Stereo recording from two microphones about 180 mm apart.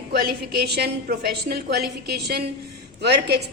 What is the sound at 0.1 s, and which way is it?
A woman's voice, 60° right (ahead or behind).